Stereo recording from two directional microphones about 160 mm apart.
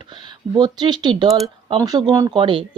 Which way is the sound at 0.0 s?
30° right (ahead or behind).